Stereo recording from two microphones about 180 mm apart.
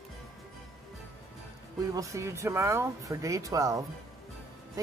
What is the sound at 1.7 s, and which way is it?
Speech, 20° right (ahead or behind).